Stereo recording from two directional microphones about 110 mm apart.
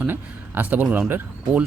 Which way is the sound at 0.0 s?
15° right (ahead or behind).